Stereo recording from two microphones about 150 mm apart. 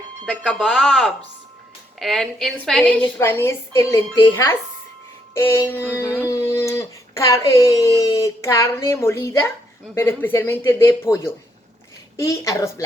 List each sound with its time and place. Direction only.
0.3 s a woman's voice: 5° left (ahead or behind)
3.2 s speech: 15° left (ahead or behind)